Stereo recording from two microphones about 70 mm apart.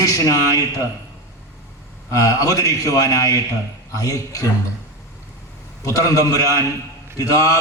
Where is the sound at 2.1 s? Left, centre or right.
Left.